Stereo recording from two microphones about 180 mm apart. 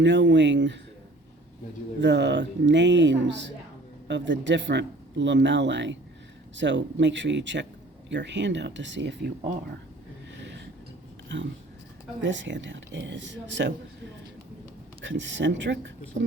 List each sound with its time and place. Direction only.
0.0 s speech: 80° right
2.0 s speech: 80° right
10.3 s a sound: 85° right
11.3 s speech: 85° right
15.0 s speech: 90° right